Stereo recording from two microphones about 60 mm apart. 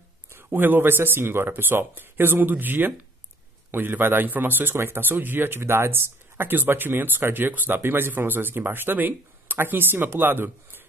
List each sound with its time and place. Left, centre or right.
0.3 s speech: right